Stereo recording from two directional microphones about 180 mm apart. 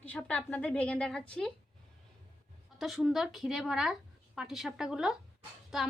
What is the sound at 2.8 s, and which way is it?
Speech, centre (ahead or behind).